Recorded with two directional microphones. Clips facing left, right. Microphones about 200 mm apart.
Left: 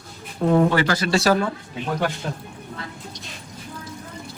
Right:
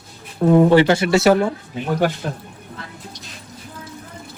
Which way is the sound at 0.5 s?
25° right (ahead or behind).